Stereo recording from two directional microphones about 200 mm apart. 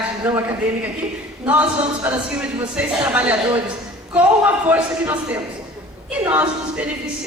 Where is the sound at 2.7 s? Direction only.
5° right (ahead or behind).